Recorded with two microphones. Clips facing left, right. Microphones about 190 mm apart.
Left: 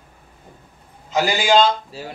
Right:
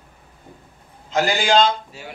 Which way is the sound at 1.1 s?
5° left (ahead or behind).